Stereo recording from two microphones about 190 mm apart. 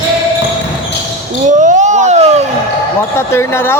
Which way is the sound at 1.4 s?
40° right (ahead or behind).